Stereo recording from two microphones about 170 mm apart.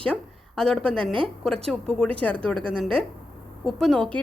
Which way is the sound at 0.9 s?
30° right (ahead or behind).